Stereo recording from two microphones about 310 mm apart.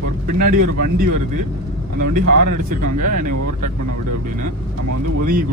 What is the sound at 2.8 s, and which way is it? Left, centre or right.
Speech, right.